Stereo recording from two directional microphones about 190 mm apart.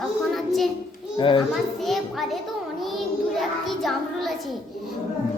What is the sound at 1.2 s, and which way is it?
Speech, 25° left (ahead or behind).